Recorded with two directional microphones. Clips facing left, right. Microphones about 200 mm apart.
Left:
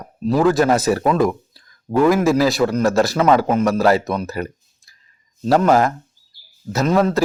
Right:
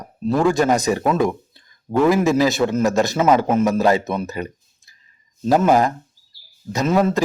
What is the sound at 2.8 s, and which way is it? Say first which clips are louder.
Speech: left 1 dB; 20° right (ahead or behind).